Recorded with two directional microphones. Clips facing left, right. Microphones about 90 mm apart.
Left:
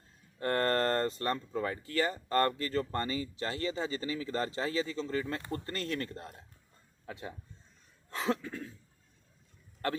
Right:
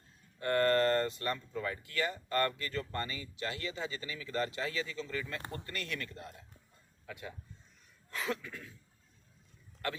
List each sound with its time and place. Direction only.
0.3 s speech: 40° left (ahead or behind)